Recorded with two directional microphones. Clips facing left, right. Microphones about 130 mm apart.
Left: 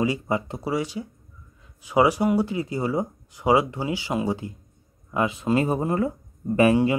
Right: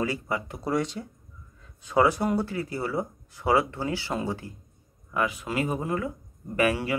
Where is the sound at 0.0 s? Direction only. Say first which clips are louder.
Left 5 dB; 20° left (ahead or behind).